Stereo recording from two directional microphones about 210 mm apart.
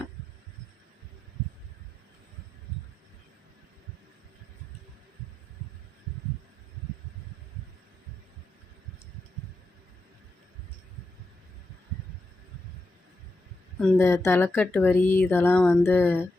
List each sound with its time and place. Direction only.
13.7 s speech: 5° left (ahead or behind)